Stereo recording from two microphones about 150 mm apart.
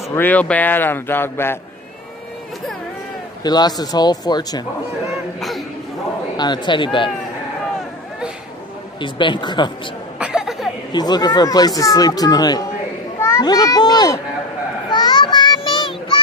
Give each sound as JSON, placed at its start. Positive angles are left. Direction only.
{"t": 0.1, "sound": "speech", "side_deg": 10}
{"t": 3.4, "sound": "speech", "side_deg": 25}
{"t": 5.4, "sound": "a sound", "side_deg": 0}
{"t": 6.3, "sound": "speech", "side_deg": 30}
{"t": 9.0, "sound": "speech", "side_deg": 30}
{"t": 10.2, "sound": "a sound", "side_deg": -5}
{"t": 10.9, "sound": "speech", "side_deg": 25}
{"t": 14.8, "sound": "child singing", "side_deg": 30}